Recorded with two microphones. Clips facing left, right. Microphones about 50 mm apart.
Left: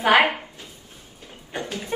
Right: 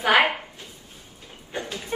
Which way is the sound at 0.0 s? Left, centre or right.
Left.